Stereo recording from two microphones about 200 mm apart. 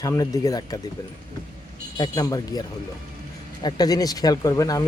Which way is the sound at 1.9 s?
20° left (ahead or behind).